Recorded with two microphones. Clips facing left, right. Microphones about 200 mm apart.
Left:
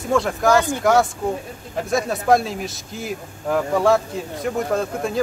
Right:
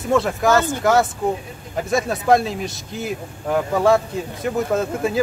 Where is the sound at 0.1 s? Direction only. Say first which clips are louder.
Even; centre (ahead or behind).